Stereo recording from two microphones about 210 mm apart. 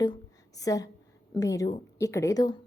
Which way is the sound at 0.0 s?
20° left (ahead or behind).